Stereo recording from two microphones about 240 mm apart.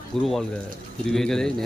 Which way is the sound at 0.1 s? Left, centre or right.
Centre.